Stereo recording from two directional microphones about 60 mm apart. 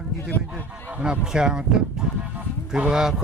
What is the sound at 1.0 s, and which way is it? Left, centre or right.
Speech, centre.